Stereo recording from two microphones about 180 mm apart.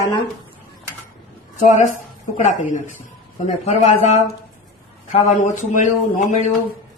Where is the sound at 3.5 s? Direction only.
40° left (ahead or behind).